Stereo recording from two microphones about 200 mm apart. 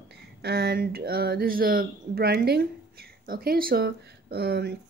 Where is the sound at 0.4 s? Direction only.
55° right (ahead or behind).